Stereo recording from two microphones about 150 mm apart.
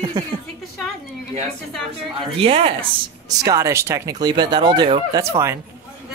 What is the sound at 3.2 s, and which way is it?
A woman's voice, 25° right (ahead or behind).